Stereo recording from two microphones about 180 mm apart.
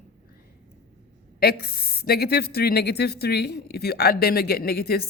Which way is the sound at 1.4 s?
60° left (ahead or behind).